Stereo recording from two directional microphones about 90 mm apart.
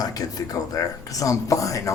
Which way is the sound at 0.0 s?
45° left (ahead or behind).